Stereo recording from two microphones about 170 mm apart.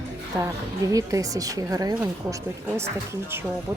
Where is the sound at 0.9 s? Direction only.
20° right (ahead or behind).